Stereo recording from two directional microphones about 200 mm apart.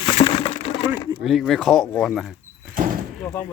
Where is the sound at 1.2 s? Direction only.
Centre (ahead or behind).